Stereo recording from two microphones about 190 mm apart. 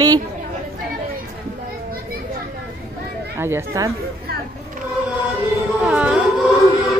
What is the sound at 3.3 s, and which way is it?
Speech, 15° right (ahead or behind).